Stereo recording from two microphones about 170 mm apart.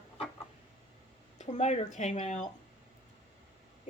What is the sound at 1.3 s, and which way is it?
Speech, 45° left (ahead or behind).